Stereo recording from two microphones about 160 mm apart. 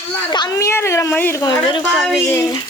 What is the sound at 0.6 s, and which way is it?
Speech, 15° left (ahead or behind).